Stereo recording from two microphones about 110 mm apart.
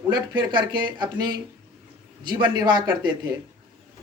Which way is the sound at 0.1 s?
40° right (ahead or behind).